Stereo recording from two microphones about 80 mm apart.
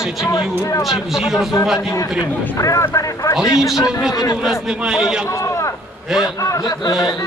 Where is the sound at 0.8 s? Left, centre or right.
Centre.